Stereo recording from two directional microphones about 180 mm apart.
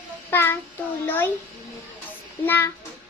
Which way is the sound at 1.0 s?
10° left (ahead or behind).